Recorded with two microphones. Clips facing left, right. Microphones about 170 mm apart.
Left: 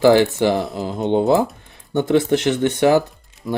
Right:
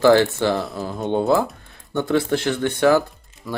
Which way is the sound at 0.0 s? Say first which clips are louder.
Left 2 dB; 15° left (ahead or behind).